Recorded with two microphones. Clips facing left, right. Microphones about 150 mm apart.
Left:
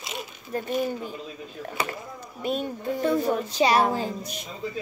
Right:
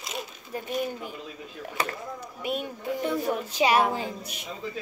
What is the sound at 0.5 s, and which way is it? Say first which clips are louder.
Speech: left 4 dB; 10° right (ahead or behind).